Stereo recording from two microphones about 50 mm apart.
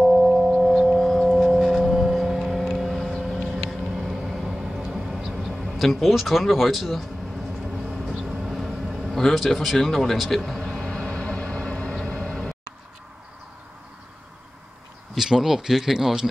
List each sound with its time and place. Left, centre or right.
0.0 s singing bowl: centre
2.0 s vehicle: centre
15.1 s speech: centre